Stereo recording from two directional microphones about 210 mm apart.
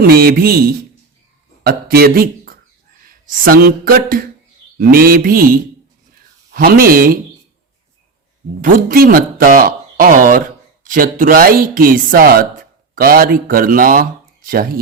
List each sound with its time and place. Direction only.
0.1 s speech: 45° right (ahead or behind)
8.6 s speech: 40° right (ahead or behind)